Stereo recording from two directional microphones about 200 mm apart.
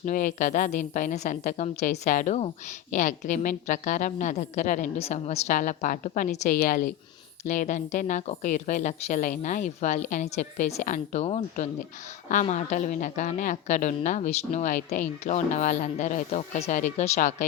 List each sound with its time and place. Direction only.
0.0 s a woman's voice: 40° left (ahead or behind)